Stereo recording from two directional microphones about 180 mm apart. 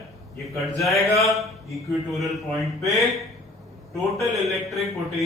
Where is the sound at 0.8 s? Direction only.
Centre (ahead or behind).